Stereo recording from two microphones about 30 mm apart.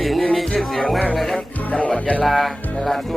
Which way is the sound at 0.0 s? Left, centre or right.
Centre.